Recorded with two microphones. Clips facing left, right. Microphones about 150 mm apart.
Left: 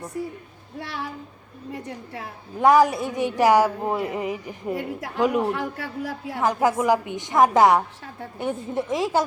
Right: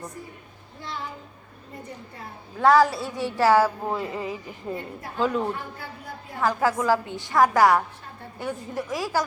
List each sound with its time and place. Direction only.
0.8 s a woman's voice: 70° left (ahead or behind)
2.6 s a woman's voice: 15° left (ahead or behind)
4.7 s a man's voice: 85° left
6.4 s a woman's voice: 20° left (ahead or behind)